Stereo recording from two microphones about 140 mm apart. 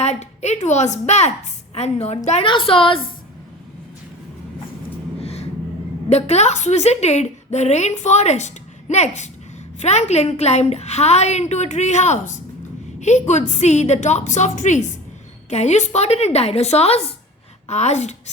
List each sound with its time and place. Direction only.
0.0 s a woman's voice: 50° left (ahead or behind)
2.5 s a woman's voice: 40° left (ahead or behind)
5.2 s vehicle: 50° left (ahead or behind)
6.1 s a woman's voice: 50° left (ahead or behind)